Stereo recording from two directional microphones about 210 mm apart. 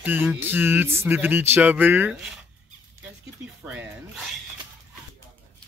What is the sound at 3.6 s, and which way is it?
Speech, 5° right (ahead or behind).